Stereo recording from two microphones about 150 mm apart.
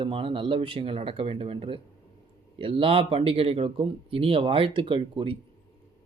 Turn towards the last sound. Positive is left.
turn(degrees=-35)  # may be behind; listen again after turning